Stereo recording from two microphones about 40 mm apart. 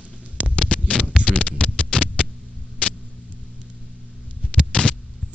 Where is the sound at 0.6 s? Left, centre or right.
Left.